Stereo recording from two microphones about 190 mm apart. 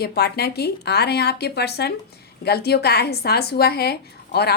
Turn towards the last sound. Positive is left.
turn(degrees=60)  # may be behind; listen again after turning